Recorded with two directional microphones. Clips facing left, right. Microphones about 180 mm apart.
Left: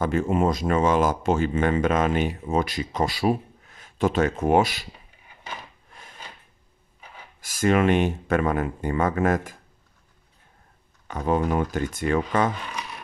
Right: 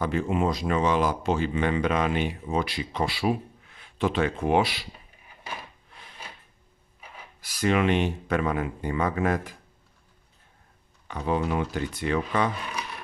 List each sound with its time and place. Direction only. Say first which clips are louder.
0.0 s speech: left 3 dB; 45° left (ahead or behind)
5.9 s a sound: left 3 dB; 45° left (ahead or behind)
7.3 s speech: left 3 dB; 45° left (ahead or behind)
11.1 s speech: left 3 dB; 45° left (ahead or behind)